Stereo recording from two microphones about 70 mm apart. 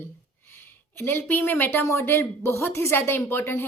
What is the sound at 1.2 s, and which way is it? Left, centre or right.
A woman's voice, left.